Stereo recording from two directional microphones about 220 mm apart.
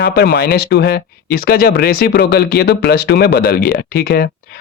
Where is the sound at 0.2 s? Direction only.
45° left (ahead or behind).